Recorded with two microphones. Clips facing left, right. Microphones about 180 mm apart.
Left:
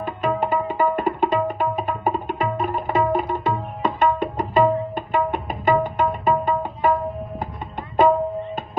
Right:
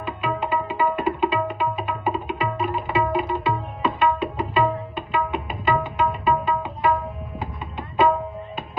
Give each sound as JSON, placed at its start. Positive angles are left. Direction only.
{"t": 0.0, "sound": "tabla", "side_deg": 45}
{"t": 7.3, "sound": "music", "side_deg": 45}